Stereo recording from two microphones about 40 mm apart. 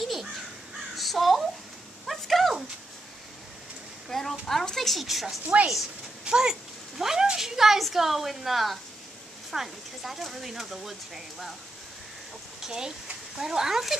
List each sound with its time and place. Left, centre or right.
0.0 s crow: centre
2.0 s a sound: centre
4.1 s a sound: centre
4.6 s a woman's voice: centre
5.4 s a woman's voice: right
6.2 s dog: centre
7.0 s a woman's voice: centre
12.6 s speech: centre